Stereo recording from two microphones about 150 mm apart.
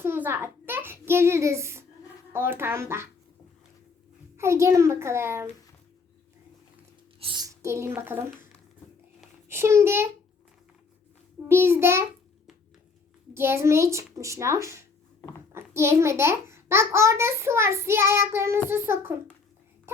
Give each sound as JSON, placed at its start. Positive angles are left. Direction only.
{"t": 0.0, "sound": "child singing", "side_deg": -15}
{"t": 2.3, "sound": "a child's voice", "side_deg": -15}
{"t": 4.4, "sound": "a child's voice", "side_deg": -20}
{"t": 7.2, "sound": "a sound", "side_deg": -35}
{"t": 7.4, "sound": "speech", "side_deg": -20}
{"t": 9.5, "sound": "a child's voice", "side_deg": -15}
{"t": 11.4, "sound": "a child's voice", "side_deg": -15}
{"t": 13.3, "sound": "a child's voice", "side_deg": -15}